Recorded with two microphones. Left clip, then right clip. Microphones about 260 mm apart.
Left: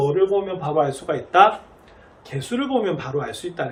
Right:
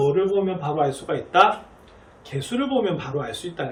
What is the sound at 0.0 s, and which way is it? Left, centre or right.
A man's voice, centre.